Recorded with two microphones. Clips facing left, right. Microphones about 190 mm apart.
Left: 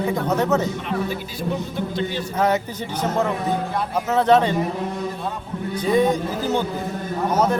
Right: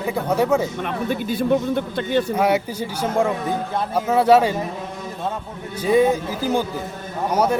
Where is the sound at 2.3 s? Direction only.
10° right (ahead or behind).